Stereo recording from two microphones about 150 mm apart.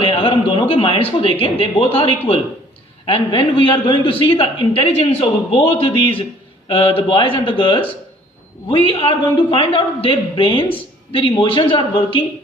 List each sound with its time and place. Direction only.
0.0 s a sound: 35° left (ahead or behind)
0.7 s a man's voice: 35° left (ahead or behind)
3.1 s a man's voice: 35° left (ahead or behind)